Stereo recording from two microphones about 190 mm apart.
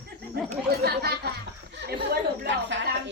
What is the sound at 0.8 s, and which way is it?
Speech, 60° right (ahead or behind).